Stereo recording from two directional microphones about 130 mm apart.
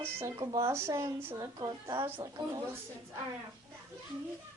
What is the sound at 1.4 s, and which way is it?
A woman's voice, 30° right (ahead or behind).